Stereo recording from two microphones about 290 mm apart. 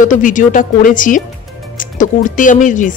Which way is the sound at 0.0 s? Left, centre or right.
Left.